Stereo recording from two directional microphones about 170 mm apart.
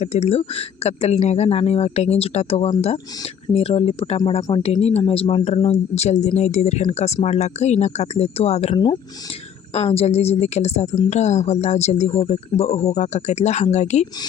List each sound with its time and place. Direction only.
0.0 s speech: 40° left (ahead or behind)
8.7 s speech: 25° left (ahead or behind)
9.7 s speech: 35° left (ahead or behind)